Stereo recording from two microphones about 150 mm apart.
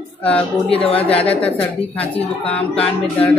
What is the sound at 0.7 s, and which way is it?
Speech, 40° left (ahead or behind).